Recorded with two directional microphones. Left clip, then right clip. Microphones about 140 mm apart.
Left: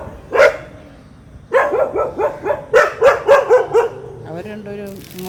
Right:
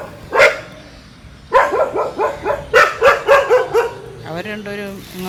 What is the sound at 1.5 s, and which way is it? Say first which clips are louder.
Dog: right 1 dB; 35° left (ahead or behind).